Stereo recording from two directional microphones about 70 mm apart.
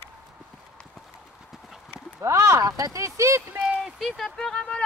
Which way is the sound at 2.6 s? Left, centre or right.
Right.